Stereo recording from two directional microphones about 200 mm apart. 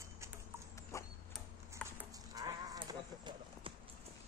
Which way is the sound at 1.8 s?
15° right (ahead or behind).